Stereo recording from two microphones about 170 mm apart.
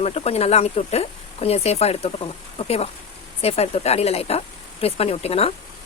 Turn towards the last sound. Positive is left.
turn(degrees=35)  # may be behind; listen again after turning